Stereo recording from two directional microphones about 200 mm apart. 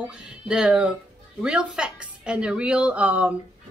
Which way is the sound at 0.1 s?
5° right (ahead or behind).